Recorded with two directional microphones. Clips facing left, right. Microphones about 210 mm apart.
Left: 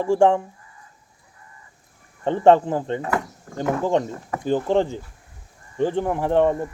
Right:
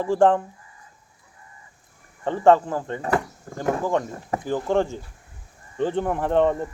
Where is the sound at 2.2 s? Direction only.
20° left (ahead or behind).